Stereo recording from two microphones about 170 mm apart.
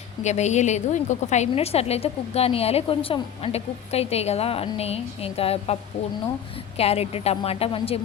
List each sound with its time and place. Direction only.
0.2 s a woman's voice: 40° left (ahead or behind)
6.7 s a woman's voice: 35° left (ahead or behind)